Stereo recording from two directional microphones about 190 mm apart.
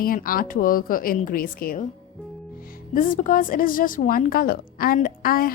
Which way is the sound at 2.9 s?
45° left (ahead or behind).